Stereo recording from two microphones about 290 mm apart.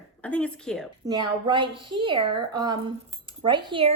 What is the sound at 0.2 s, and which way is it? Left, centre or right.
Speech, centre.